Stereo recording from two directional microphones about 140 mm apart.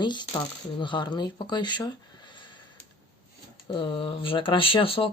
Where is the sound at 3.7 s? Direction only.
40° left (ahead or behind).